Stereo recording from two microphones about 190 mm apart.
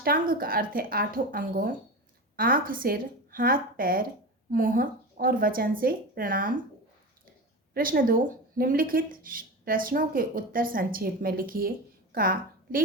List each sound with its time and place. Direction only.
0.0 s speech: 50° right (ahead or behind)
7.7 s a woman's voice: 50° right (ahead or behind)